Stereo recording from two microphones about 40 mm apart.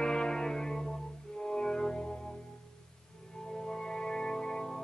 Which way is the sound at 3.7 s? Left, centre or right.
Centre.